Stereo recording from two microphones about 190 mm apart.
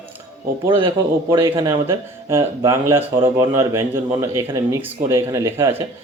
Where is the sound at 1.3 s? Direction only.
15° right (ahead or behind).